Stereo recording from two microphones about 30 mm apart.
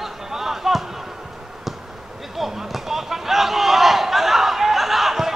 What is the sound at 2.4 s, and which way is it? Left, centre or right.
Battle cry, centre.